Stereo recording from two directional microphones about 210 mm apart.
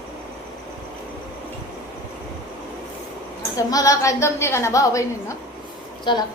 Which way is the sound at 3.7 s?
15° left (ahead or behind).